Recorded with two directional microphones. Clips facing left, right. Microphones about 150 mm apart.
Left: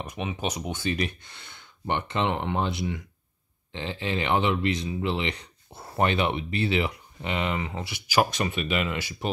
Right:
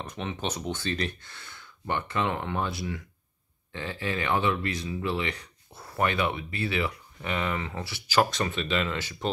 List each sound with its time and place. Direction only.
0.0 s speech: 10° left (ahead or behind)